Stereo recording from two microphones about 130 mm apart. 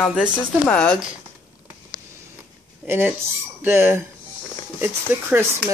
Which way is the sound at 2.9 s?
15° right (ahead or behind).